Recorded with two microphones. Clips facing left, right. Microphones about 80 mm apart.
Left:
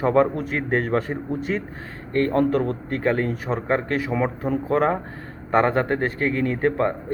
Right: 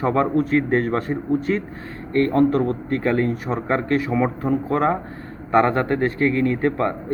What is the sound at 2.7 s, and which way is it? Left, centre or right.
Speech, left.